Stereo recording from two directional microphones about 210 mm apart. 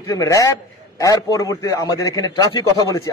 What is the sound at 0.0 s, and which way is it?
A man's voice, 15° left (ahead or behind).